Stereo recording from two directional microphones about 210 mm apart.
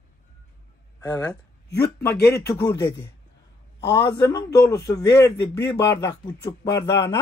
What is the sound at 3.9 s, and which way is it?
Speech, 15° left (ahead or behind).